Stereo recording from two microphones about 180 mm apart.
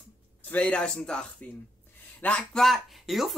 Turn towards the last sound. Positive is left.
turn(degrees=0)  # may be behind; listen again after turning